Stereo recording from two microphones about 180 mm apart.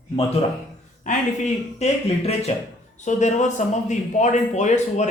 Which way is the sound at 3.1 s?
40° left (ahead or behind).